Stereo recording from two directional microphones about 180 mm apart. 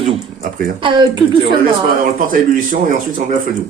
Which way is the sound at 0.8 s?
25° right (ahead or behind).